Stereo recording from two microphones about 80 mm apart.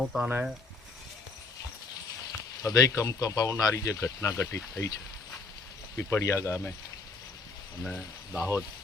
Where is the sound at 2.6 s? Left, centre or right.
Left.